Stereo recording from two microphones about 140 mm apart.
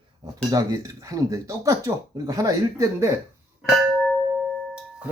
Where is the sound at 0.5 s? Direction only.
25° right (ahead or behind).